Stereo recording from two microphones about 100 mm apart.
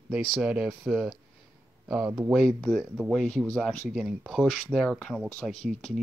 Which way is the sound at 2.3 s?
Centre (ahead or behind).